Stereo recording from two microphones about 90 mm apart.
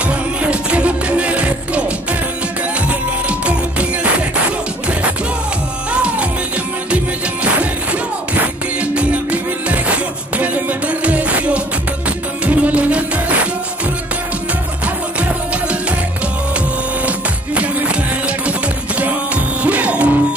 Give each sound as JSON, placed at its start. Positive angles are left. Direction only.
{"t": 0.0, "sound": "music", "side_deg": -15}
{"t": 2.9, "sound": "music", "side_deg": -15}
{"t": 5.9, "sound": "music", "side_deg": -15}
{"t": 8.9, "sound": "music", "side_deg": -15}
{"t": 15.1, "sound": "music", "side_deg": -15}
{"t": 17.6, "sound": "music", "side_deg": -15}